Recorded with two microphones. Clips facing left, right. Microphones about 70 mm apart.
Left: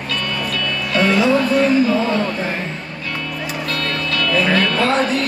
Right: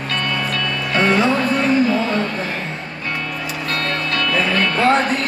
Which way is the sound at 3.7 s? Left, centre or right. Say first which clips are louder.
Right 2 dB; right.